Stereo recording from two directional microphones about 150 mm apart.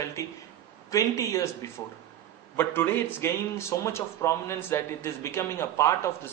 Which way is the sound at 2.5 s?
15° left (ahead or behind).